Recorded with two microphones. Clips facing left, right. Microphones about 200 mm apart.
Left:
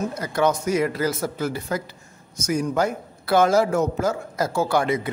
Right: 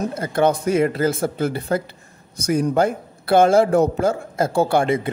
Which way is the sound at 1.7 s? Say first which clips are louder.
Right 5 dB; 50° right (ahead or behind).